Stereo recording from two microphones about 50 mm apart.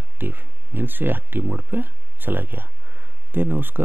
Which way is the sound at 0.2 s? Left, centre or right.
Right.